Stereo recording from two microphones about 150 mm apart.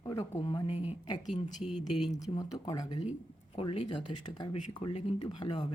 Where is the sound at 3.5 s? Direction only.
35° left (ahead or behind).